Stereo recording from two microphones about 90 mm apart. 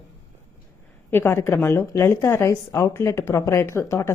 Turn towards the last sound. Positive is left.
turn(degrees=30)  # may be behind; listen again after turning